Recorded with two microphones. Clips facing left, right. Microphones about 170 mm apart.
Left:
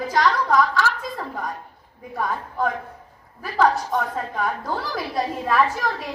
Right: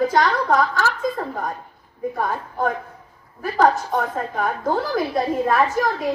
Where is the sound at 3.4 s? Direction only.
45° right (ahead or behind).